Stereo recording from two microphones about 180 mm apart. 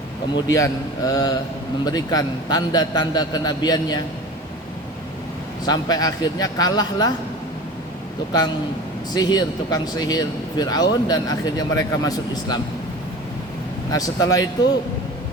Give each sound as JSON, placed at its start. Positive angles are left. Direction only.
{"t": 0.4, "sound": "speech", "side_deg": 15}
{"t": 5.6, "sound": "speech", "side_deg": 20}
{"t": 9.1, "sound": "speech", "side_deg": 20}
{"t": 13.9, "sound": "speech", "side_deg": 20}